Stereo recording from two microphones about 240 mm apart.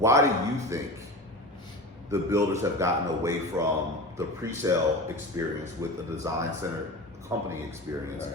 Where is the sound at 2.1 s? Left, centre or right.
Centre.